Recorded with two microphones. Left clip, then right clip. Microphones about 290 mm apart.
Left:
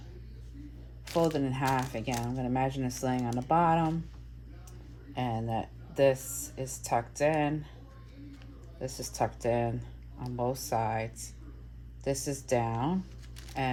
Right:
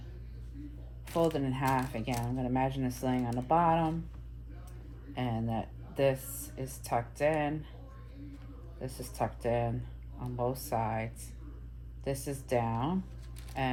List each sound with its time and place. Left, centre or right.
1.1 s speech: left
5.1 s speech: left
8.8 s speech: left